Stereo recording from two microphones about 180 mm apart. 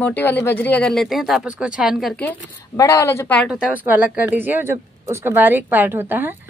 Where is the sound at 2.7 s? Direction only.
15° left (ahead or behind).